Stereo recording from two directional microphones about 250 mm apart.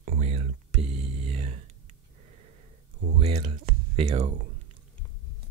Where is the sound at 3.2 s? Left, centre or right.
Right.